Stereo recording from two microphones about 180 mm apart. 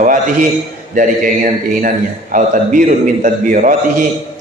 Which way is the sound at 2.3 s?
45° right (ahead or behind).